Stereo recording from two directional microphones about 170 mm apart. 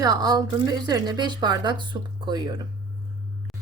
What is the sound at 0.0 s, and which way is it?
Speech, 25° right (ahead or behind).